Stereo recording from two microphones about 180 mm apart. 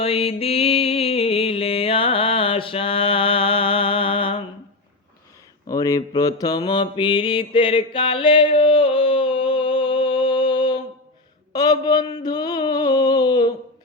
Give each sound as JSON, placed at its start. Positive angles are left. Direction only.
{"t": 0.0, "sound": "music", "side_deg": 30}
{"t": 5.6, "sound": "mantra", "side_deg": 20}
{"t": 11.5, "sound": "a man's voice", "side_deg": 20}
{"t": 12.1, "sound": "a sound", "side_deg": 20}